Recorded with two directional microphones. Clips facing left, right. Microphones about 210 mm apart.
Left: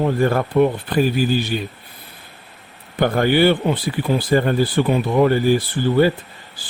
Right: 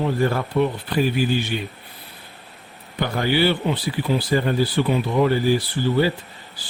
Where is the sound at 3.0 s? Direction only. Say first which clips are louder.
Left 5 dB; 55° left (ahead or behind).